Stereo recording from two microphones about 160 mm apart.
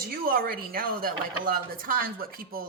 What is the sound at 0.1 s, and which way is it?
Speech, 70° right (ahead or behind).